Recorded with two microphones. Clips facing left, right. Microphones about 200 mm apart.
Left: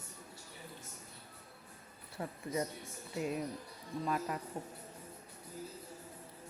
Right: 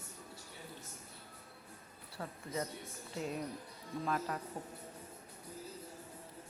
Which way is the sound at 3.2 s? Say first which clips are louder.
Left 3 dB; 5° left (ahead or behind).